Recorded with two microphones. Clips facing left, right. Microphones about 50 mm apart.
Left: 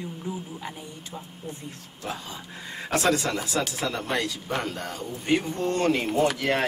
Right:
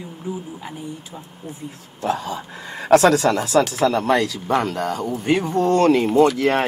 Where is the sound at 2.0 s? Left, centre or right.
Right.